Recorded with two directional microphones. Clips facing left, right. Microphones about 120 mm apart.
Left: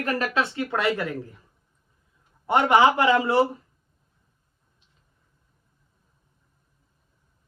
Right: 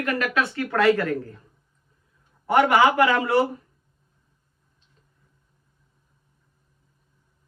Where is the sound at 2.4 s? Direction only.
25° left (ahead or behind).